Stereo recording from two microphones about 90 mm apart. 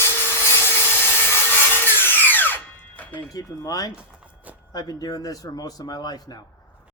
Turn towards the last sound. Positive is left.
turn(degrees=45)  # may be behind; listen again after turning